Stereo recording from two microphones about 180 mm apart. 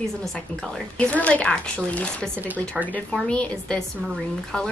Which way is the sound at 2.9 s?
10° left (ahead or behind).